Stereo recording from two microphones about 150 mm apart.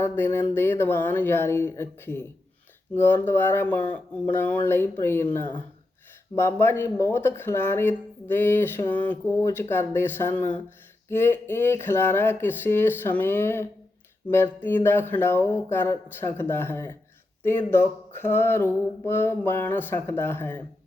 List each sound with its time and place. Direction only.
0.0 s speech: 15° left (ahead or behind)